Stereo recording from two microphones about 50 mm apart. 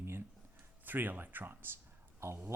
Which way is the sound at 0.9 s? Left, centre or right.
Right.